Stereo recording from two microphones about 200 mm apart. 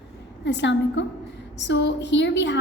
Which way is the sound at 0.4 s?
60° left (ahead or behind).